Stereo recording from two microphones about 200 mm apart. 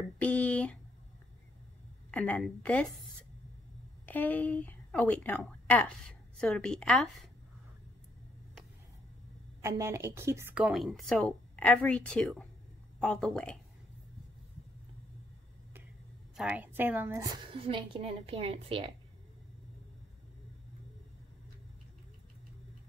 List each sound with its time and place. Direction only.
0.2 s a sound: 5° left (ahead or behind)
2.0 s a woman's voice: 10° left (ahead or behind)
4.0 s a woman's voice: 10° left (ahead or behind)
9.6 s a woman's voice: 15° right (ahead or behind); by 13.6 s 5° left (ahead or behind)
16.3 s a woman's voice: 5° right (ahead or behind); by 18.9 s 30° right (ahead or behind)